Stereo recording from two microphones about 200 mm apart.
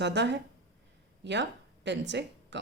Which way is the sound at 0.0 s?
60° right (ahead or behind).